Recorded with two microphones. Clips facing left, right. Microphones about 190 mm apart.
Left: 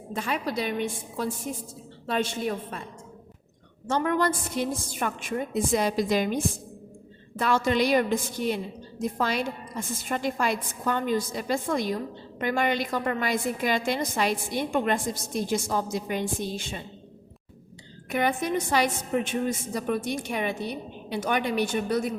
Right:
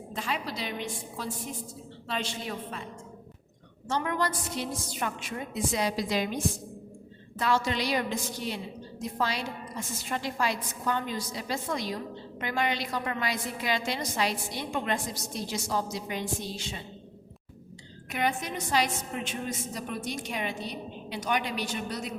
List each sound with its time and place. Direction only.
0.2 s a woman's voice: 55° left (ahead or behind)
3.8 s a woman's voice: 50° left (ahead or behind)
18.1 s a woman's voice: 55° left (ahead or behind)